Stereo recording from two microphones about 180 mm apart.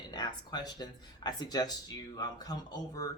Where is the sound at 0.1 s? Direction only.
25° left (ahead or behind).